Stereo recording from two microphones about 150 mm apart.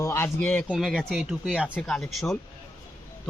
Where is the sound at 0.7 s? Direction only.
Centre (ahead or behind).